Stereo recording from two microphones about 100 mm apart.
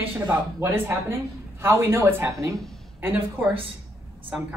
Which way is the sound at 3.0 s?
20° right (ahead or behind).